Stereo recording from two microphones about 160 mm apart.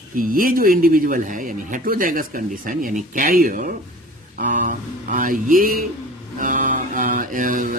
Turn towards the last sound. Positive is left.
turn(degrees=-55)  # may be behind; listen again after turning